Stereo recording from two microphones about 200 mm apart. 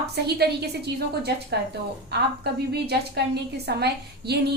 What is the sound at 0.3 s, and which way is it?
A woman's voice, 55° right (ahead or behind).